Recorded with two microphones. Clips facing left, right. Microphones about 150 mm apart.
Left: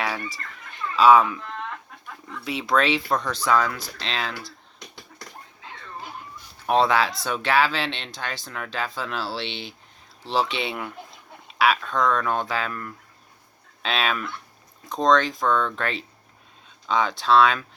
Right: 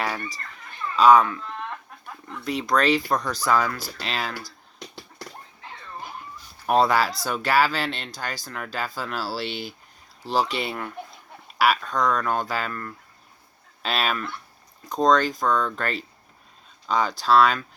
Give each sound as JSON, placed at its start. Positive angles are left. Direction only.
{"t": 0.0, "sound": "speech", "side_deg": 0}
{"t": 2.4, "sound": "speech", "side_deg": 0}
{"t": 6.7, "sound": "speech", "side_deg": 0}